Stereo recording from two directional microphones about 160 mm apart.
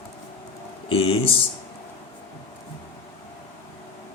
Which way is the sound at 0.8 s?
35° left (ahead or behind).